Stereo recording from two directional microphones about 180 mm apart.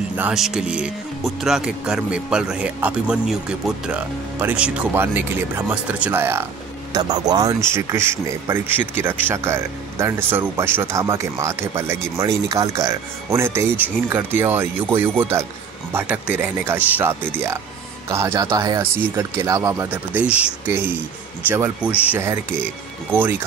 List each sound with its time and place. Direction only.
0.1 s speech: 5° right (ahead or behind)